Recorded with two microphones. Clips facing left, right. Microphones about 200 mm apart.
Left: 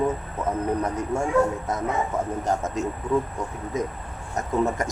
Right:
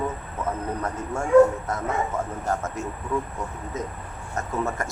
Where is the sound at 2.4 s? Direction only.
20° left (ahead or behind).